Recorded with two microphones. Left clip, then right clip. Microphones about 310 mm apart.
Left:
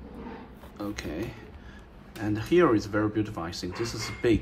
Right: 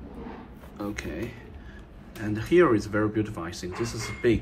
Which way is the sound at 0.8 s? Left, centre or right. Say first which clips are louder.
Right 1 dB; centre.